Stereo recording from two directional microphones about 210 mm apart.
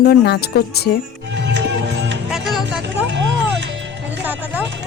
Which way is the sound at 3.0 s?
60° right (ahead or behind).